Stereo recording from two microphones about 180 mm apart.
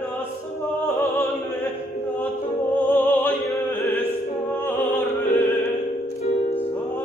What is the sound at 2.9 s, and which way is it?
Opera, 10° left (ahead or behind).